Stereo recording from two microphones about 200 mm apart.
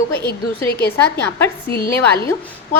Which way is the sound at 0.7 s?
50° left (ahead or behind).